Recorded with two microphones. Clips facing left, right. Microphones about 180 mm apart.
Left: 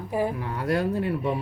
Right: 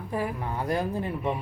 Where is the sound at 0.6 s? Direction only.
70° left (ahead or behind).